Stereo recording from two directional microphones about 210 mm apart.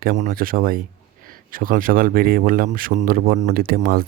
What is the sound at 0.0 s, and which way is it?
Speech, 45° right (ahead or behind).